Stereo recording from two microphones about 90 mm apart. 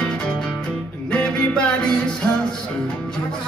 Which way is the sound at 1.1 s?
10° left (ahead or behind).